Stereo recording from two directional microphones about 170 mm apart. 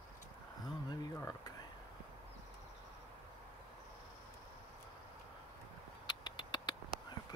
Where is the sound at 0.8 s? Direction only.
20° left (ahead or behind).